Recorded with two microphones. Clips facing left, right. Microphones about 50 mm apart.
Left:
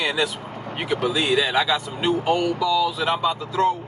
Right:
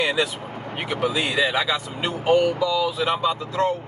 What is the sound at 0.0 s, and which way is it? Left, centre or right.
Speech, centre.